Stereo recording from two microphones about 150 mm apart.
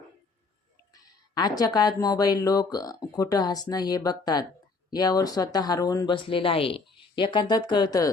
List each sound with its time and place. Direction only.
0.9 s speech: 25° left (ahead or behind)